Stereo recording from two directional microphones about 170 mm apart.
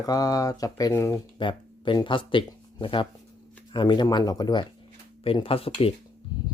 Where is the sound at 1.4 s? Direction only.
30° left (ahead or behind).